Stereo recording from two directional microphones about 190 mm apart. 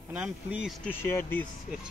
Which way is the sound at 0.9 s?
10° left (ahead or behind).